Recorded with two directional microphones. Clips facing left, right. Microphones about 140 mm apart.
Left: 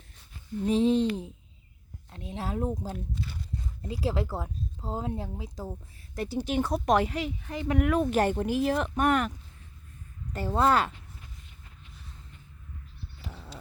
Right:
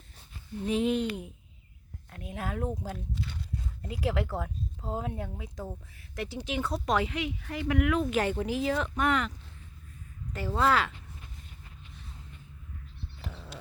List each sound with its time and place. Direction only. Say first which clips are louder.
0.7 s speech: left 4 dB; 30° left (ahead or behind)
6.1 s speech: left 5 dB; 40° left (ahead or behind)
7.4 s speech: left 1 dB; 25° left (ahead or behind); by 9.3 s 45° left (ahead or behind)
10.3 s speech: left 2 dB; 40° left (ahead or behind)